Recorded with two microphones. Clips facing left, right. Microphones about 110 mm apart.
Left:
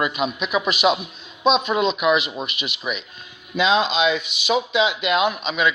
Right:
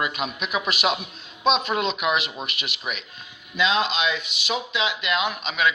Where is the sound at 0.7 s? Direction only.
25° left (ahead or behind).